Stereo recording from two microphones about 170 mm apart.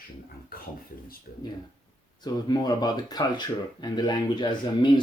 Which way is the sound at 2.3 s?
25° left (ahead or behind).